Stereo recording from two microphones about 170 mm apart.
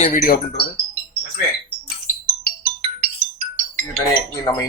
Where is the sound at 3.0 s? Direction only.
40° right (ahead or behind).